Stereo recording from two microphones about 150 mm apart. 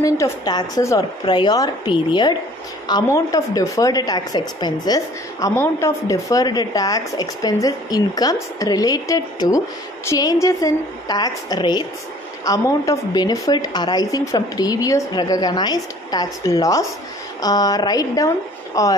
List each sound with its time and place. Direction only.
0.0 s a woman's voice: 25° left (ahead or behind)